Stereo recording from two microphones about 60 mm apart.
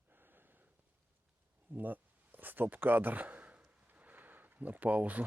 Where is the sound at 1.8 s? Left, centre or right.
Right.